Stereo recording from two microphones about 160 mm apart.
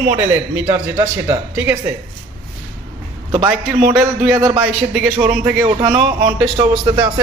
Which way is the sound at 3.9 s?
15° right (ahead or behind).